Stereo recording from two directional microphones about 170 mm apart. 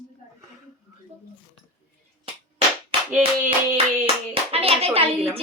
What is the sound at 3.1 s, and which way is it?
Speech, 10° right (ahead or behind).